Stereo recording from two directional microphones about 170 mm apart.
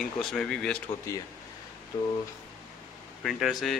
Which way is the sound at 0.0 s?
Centre (ahead or behind).